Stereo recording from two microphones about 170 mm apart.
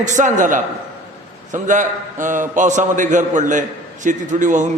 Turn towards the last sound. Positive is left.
turn(degrees=-45)  # may be behind; listen again after turning